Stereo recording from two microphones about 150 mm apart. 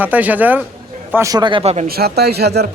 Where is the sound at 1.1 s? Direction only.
20° right (ahead or behind).